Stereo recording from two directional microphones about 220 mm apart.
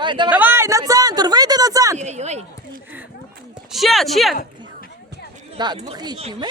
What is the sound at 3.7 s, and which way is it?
Speech, centre (ahead or behind).